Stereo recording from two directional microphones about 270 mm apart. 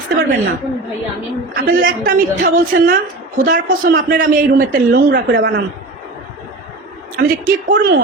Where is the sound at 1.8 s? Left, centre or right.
Right.